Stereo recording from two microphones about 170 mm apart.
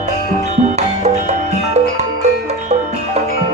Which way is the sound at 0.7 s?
40° right (ahead or behind).